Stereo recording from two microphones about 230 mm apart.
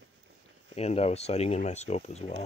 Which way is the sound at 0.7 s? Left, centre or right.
Left.